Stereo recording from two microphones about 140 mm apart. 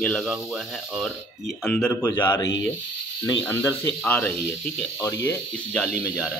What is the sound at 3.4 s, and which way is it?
Speech, 15° left (ahead or behind).